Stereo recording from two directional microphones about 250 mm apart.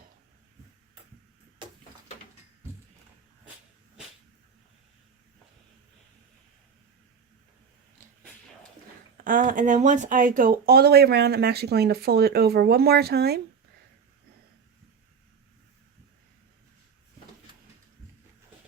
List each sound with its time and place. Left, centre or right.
9.2 s speech: right